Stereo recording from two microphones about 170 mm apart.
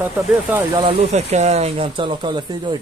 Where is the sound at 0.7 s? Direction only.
30° right (ahead or behind).